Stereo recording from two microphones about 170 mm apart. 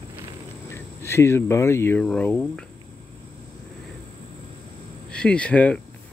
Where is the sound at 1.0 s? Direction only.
15° left (ahead or behind).